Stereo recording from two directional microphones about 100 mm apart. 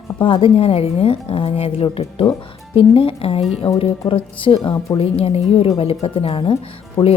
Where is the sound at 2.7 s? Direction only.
65° left (ahead or behind).